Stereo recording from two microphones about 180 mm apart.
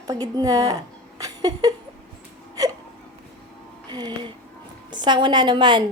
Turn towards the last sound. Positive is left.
turn(degrees=-25)  # may be behind; listen again after turning